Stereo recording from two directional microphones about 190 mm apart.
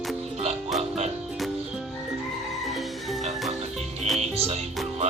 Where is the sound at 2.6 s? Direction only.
Centre (ahead or behind).